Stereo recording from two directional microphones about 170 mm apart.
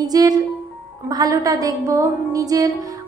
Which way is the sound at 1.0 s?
20° right (ahead or behind).